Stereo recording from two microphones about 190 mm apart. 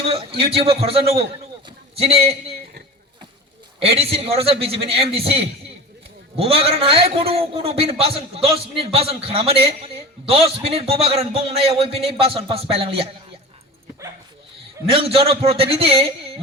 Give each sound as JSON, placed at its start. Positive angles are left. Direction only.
{"t": 0.0, "sound": "a man's voice", "side_deg": -30}
{"t": 3.8, "sound": "a man's voice", "side_deg": -30}
{"t": 14.9, "sound": "a man's voice", "side_deg": -30}